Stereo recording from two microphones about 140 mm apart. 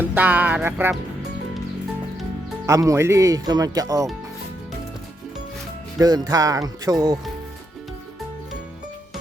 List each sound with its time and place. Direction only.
0.0 s music: 10° right (ahead or behind)
2.6 s speech: 20° right (ahead or behind)
6.0 s speech: 30° right (ahead or behind)